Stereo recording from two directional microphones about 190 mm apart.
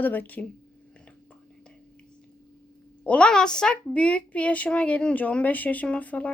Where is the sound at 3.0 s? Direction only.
5° left (ahead or behind).